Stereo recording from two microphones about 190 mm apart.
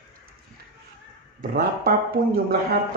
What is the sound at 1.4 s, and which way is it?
A man's voice, 55° right (ahead or behind).